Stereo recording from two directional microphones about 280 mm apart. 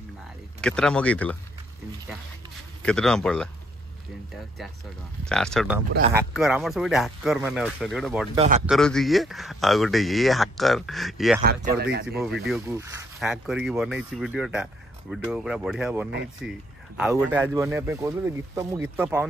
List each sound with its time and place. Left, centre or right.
0.6 s speech: centre
2.8 s speech: centre
5.3 s speech: centre
8.4 s speech: right
8.6 s speech: centre
11.4 s speech: right
12.4 s speech: centre